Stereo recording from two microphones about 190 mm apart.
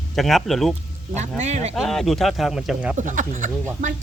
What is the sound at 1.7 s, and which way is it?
Speech, centre (ahead or behind).